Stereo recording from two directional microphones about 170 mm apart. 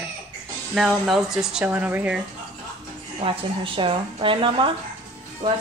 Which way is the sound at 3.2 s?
30° right (ahead or behind).